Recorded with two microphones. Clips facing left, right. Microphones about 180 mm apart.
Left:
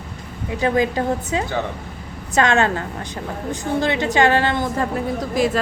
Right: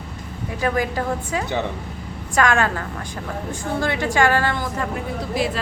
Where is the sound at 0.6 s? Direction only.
25° left (ahead or behind).